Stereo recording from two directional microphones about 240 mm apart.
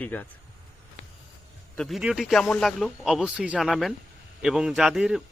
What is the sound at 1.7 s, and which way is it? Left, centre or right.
Speech, centre.